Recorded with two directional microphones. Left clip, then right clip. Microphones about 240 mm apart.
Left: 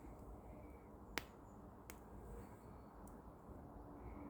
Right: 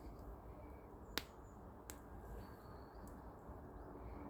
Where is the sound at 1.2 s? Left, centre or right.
Right.